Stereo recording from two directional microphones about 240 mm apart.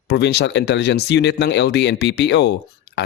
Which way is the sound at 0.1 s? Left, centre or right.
Left.